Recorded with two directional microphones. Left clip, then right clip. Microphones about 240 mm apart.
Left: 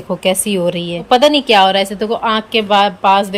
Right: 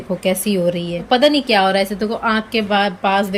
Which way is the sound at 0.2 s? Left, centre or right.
Centre.